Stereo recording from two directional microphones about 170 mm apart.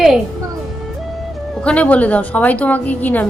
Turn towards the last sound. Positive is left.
turn(degrees=10)  # may be behind; listen again after turning